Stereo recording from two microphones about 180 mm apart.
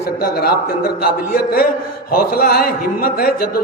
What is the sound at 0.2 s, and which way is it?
A man's voice, 55° left (ahead or behind).